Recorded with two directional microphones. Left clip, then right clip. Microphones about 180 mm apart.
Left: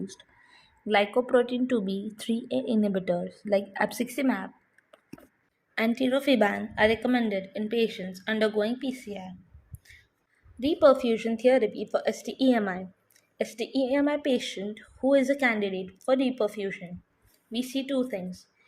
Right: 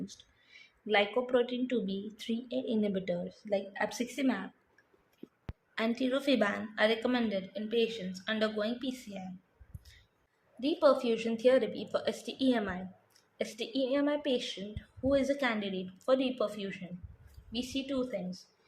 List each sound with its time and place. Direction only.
0.9 s a woman's voice: 25° left (ahead or behind)
5.7 s a woman's voice: 25° left (ahead or behind)
10.6 s a woman's voice: 30° left (ahead or behind)
13.3 s a woman's voice: 25° left (ahead or behind)